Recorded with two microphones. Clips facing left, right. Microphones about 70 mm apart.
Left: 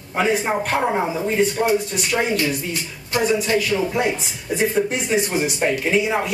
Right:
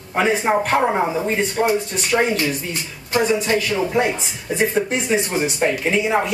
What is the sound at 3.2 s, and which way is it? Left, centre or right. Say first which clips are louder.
Speech: right 1 dB; centre.